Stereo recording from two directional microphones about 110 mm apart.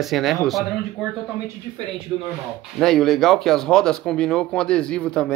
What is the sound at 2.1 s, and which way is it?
Speech, 35° right (ahead or behind).